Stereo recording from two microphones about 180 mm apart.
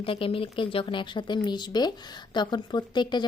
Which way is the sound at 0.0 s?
30° left (ahead or behind).